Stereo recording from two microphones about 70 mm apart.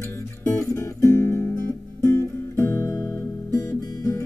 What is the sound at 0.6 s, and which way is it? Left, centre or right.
Music, left.